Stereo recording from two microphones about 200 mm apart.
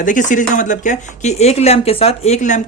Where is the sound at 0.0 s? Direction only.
40° left (ahead or behind).